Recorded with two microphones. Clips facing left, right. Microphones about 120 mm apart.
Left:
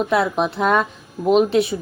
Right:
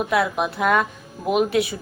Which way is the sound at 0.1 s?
25° left (ahead or behind).